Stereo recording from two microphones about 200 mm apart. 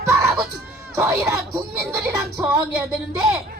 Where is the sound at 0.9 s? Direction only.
15° right (ahead or behind).